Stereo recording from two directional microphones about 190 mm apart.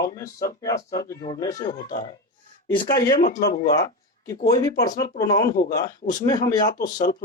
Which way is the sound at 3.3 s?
20° left (ahead or behind).